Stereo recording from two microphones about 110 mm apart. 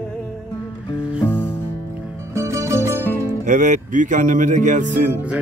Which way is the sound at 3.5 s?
90° right.